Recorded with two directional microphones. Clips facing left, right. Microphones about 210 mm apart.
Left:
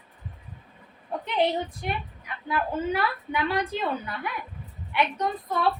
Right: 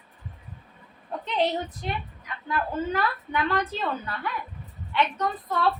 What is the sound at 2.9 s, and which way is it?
A woman's voice, 10° left (ahead or behind).